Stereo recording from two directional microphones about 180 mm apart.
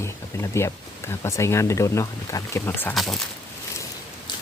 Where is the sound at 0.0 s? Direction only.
15° left (ahead or behind).